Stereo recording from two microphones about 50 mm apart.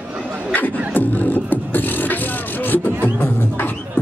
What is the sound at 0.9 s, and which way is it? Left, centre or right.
Beatboxing, left.